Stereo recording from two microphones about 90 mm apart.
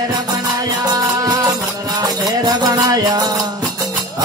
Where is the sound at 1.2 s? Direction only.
40° right (ahead or behind).